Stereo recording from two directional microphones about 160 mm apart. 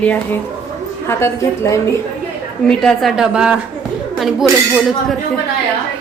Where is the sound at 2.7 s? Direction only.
Centre (ahead or behind).